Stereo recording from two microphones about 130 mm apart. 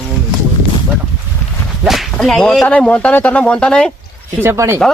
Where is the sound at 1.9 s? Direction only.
Centre (ahead or behind).